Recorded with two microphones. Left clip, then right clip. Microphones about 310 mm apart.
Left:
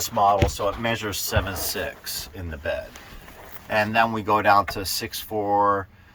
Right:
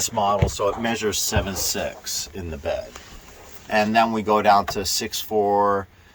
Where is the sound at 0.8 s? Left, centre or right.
Right.